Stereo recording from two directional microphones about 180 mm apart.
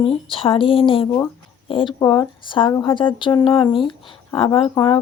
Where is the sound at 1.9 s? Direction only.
20° left (ahead or behind).